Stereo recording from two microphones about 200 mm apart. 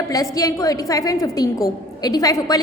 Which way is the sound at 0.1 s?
15° left (ahead or behind).